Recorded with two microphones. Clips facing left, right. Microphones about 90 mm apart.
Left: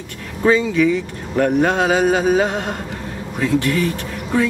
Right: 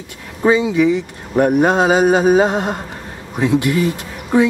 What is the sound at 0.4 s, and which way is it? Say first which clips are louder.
Speech: right 1 dB; 15° right (ahead or behind).